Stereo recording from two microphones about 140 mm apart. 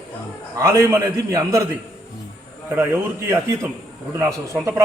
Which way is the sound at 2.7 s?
15° right (ahead or behind).